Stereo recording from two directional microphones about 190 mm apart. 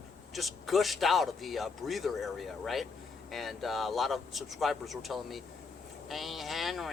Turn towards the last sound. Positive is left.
turn(degrees=0)  # may be behind; listen again after turning